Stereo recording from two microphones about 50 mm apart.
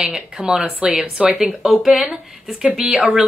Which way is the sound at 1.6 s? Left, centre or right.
Centre.